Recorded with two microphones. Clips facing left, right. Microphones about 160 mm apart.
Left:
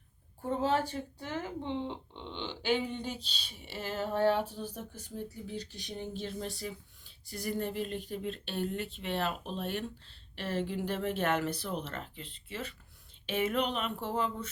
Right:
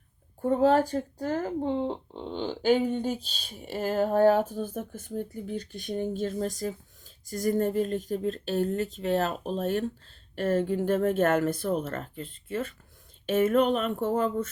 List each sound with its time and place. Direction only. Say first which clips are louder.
0.4 s speech: right 8 dB; 45° right (ahead or behind)